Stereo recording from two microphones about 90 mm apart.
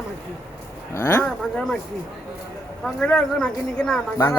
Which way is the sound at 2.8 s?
5° left (ahead or behind).